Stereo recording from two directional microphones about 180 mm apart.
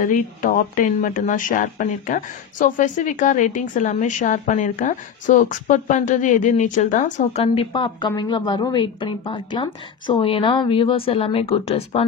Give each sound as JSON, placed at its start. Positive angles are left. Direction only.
{"t": 0.0, "sound": "speech", "side_deg": 50}
{"t": 7.4, "sound": "speech", "side_deg": 30}